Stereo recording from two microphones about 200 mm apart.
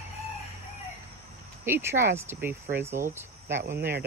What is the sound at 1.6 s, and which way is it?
Speech, 10° right (ahead or behind).